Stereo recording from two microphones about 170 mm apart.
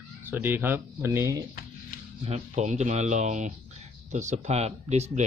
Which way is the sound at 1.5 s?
60° left (ahead or behind).